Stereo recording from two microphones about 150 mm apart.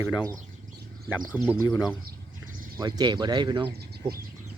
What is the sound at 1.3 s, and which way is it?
Speech, 10° right (ahead or behind).